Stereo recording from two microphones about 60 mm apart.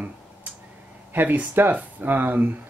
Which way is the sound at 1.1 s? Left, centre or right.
Right.